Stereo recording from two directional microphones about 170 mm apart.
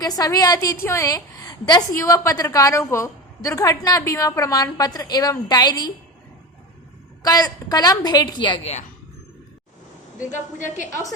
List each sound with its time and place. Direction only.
0.0 s a woman's voice: 20° left (ahead or behind)
7.2 s a woman's voice: 20° left (ahead or behind)
10.2 s a woman's voice: 50° left (ahead or behind)